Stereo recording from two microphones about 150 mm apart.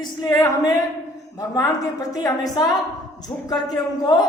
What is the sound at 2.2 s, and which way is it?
Speech, 25° left (ahead or behind).